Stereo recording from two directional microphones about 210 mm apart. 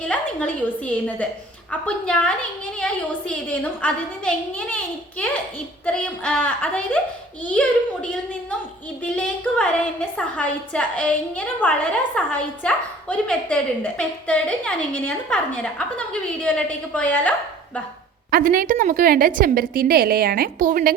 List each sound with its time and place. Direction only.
0.0 s a woman's voice: 5° left (ahead or behind)
18.3 s a woman's voice: 45° right (ahead or behind)